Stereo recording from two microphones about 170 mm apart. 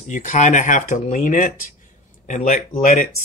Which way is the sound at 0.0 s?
45° left (ahead or behind).